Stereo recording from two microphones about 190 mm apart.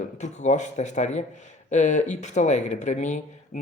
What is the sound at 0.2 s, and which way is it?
Speech, 40° left (ahead or behind).